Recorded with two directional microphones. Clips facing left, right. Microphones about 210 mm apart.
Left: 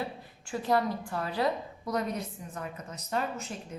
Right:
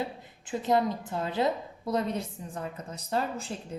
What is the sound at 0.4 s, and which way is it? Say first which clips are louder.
A woman's voice: right 2 dB; 20° right (ahead or behind).